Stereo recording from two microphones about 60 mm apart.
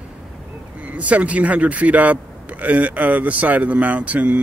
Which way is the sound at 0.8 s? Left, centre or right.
Right.